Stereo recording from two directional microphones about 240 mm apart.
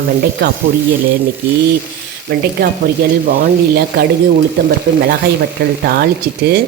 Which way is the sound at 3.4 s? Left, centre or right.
Right.